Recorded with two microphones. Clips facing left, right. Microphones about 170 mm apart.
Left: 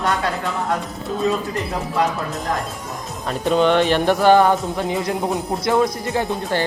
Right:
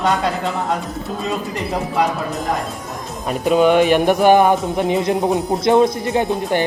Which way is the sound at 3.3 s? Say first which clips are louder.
Right 3 dB; 10° right (ahead or behind).